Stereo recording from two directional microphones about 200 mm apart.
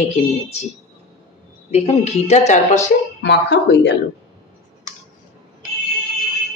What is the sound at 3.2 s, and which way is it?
Speech, 60° left (ahead or behind).